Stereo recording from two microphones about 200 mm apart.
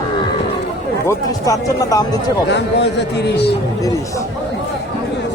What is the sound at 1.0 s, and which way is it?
Speech, 15° left (ahead or behind).